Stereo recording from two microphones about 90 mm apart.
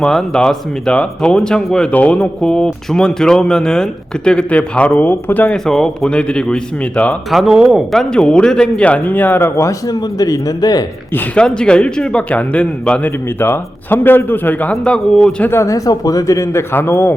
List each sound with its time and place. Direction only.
0.0 s speech: 5° left (ahead or behind)
5.5 s speech: 5° left (ahead or behind)
7.3 s speech: centre (ahead or behind); by 10.8 s 45° left (ahead or behind)
11.3 s speech: 10° left (ahead or behind)
14.7 s speech: 10° left (ahead or behind)
15.4 s speech: 30° left (ahead or behind)